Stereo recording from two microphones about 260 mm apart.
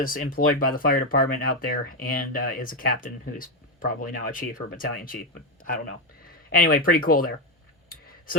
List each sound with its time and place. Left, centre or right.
0.0 s speech: left
6.2 s speech: left